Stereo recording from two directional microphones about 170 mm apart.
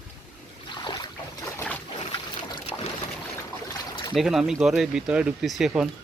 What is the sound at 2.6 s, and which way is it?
Boat, 35° left (ahead or behind).